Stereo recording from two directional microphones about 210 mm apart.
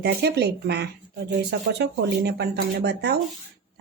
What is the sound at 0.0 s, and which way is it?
Speech, 50° right (ahead or behind).